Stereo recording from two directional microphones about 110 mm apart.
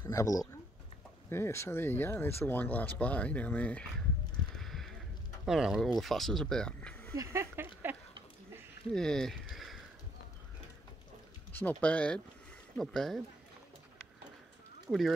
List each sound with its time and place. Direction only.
0.0 s speech: 30° left (ahead or behind); by 3.8 s 15° left (ahead or behind)
4.6 s a sound: centre (ahead or behind)
5.4 s speech: 5° right (ahead or behind)
7.2 s a sound: 25° right (ahead or behind)
8.9 s speech: 5° left (ahead or behind)
11.5 s speech: 15° left (ahead or behind)
14.9 s speech: centre (ahead or behind)